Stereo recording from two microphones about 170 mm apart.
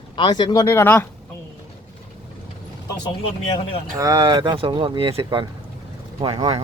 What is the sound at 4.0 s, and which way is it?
Speech, 25° right (ahead or behind).